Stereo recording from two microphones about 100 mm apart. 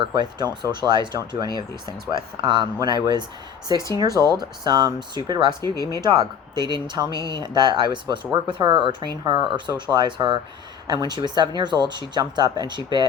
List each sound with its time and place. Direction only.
0.1 s speech: 45° right (ahead or behind)